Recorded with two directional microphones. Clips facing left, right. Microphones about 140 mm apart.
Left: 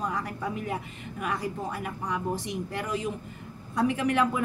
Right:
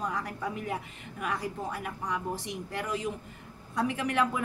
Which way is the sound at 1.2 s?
10° left (ahead or behind).